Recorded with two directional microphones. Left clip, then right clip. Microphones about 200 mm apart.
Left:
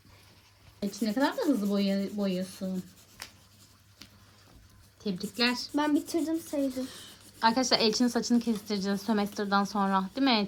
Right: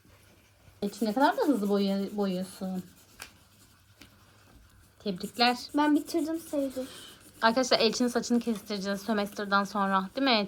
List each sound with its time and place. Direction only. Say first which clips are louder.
0.8 s speech: right 3 dB; 10° left (ahead or behind)
5.7 s speech: right 2 dB; 50° left (ahead or behind)
7.3 s a woman's voice: right 1 dB; 20° left (ahead or behind)